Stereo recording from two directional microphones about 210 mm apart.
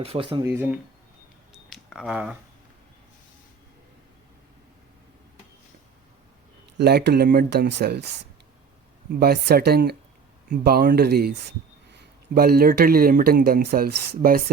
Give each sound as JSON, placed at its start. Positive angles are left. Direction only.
{"t": 0.0, "sound": "speech", "side_deg": -25}
{"t": 1.5, "sound": "camera", "side_deg": 0}
{"t": 6.7, "sound": "speech", "side_deg": -50}
{"t": 9.1, "sound": "speech", "side_deg": -50}